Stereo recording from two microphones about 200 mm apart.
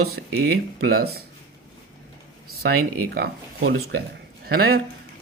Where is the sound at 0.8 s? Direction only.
50° right (ahead or behind).